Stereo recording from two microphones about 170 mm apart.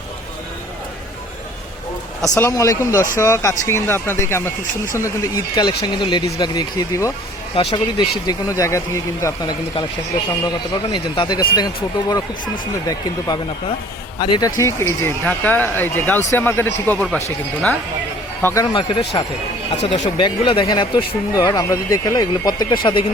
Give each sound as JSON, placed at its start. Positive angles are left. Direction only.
{"t": 2.4, "sound": "speech", "side_deg": 15}
{"t": 7.5, "sound": "speech", "side_deg": 30}
{"t": 8.3, "sound": "speech", "side_deg": 20}
{"t": 10.9, "sound": "speech", "side_deg": 25}
{"t": 18.4, "sound": "speech", "side_deg": 20}